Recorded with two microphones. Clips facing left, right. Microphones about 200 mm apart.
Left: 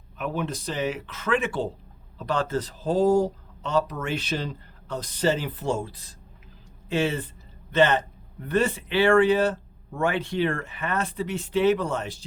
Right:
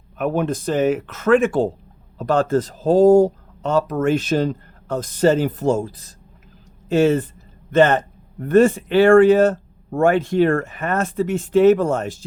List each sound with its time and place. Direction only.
0.2 s a man's voice: 50° right (ahead or behind)